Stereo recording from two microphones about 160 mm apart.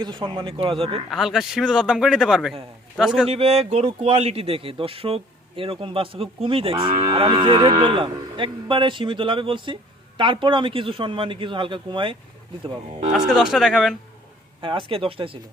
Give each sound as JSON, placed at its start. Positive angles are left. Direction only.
{"t": 0.0, "sound": "moo", "side_deg": -30}
{"t": 1.1, "sound": "a man's voice", "side_deg": 0}
{"t": 3.2, "sound": "moo", "side_deg": -40}
{"t": 13.1, "sound": "a man's voice", "side_deg": -5}
{"t": 14.6, "sound": "moo", "side_deg": -35}